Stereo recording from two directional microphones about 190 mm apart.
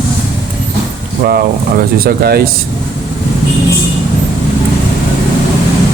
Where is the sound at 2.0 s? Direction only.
55° right (ahead or behind).